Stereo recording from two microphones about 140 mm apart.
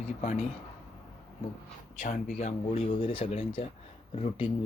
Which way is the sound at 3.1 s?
45° left (ahead or behind).